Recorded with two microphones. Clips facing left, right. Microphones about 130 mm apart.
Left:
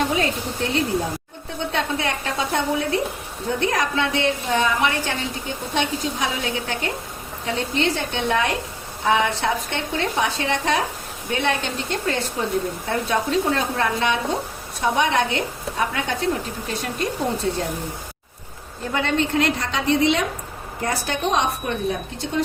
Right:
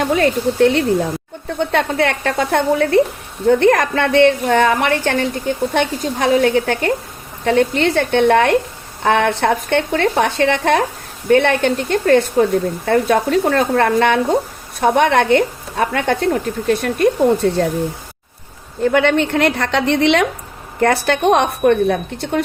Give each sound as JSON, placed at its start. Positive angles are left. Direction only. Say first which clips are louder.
{"t": 0.1, "sound": "a woman's voice", "louder": "right 8 dB", "side_deg": -60}
{"t": 18.9, "sound": "a woman's voice", "louder": "right 8 dB", "side_deg": -70}